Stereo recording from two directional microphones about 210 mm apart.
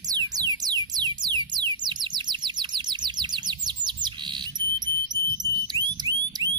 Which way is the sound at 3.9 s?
20° right (ahead or behind).